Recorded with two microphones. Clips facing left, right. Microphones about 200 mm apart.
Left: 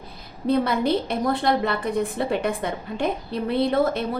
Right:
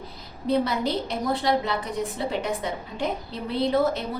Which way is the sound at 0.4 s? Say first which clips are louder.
Left 3 dB; 55° left (ahead or behind).